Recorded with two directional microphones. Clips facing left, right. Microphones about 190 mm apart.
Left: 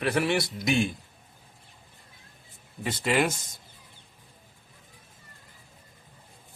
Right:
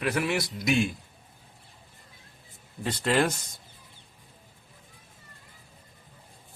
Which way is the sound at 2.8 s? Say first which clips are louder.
Right 1 dB; 5° left (ahead or behind).